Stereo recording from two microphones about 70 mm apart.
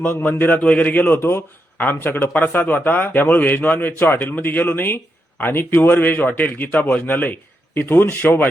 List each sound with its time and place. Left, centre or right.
0.0 s speech: left